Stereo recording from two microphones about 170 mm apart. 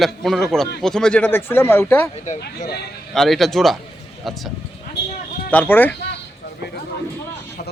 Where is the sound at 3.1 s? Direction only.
Centre (ahead or behind).